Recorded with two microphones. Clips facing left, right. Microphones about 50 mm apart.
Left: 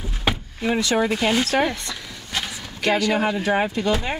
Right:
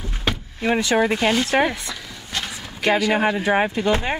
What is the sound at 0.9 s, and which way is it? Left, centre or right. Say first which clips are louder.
Speech: right 2 dB; centre.